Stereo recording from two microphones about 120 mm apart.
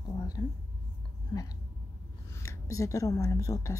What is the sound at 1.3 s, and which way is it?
Speech, 35° left (ahead or behind).